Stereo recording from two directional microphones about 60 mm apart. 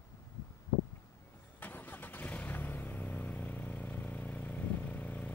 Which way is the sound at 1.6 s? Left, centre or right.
Left.